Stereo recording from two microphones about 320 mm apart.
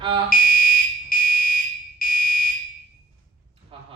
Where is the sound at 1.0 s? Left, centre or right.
Left.